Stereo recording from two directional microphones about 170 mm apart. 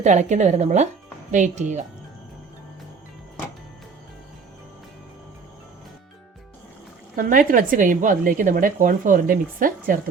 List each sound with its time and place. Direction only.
0.0 s speech: 45° right (ahead or behind)
7.2 s speech: 50° right (ahead or behind)